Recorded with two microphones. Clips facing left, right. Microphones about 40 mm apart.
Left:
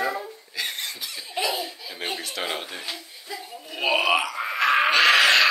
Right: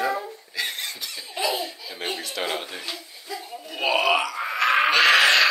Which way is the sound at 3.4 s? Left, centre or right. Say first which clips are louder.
Even; centre.